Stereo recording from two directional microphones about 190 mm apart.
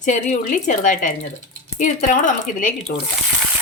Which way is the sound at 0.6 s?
40° left (ahead or behind).